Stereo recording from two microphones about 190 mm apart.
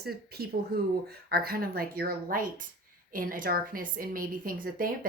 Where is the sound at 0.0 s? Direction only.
55° right (ahead or behind).